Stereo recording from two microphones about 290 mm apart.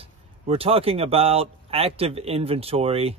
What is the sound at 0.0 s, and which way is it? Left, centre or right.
Speech, centre.